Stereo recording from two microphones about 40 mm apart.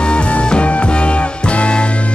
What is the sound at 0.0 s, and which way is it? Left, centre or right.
Music, left.